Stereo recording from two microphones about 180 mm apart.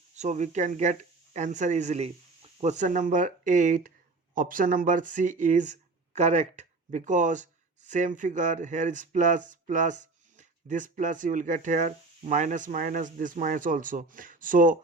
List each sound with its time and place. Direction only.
0.2 s speech: 40° right (ahead or behind)